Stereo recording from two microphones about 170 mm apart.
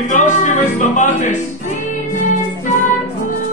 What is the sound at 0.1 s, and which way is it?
Music, 45° left (ahead or behind).